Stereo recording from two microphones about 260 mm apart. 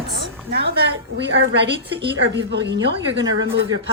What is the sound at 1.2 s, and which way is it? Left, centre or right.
Speech, right.